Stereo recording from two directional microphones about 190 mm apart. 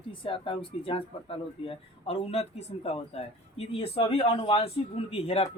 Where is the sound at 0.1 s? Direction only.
25° left (ahead or behind).